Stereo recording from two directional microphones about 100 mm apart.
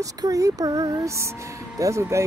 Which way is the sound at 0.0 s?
35° right (ahead or behind).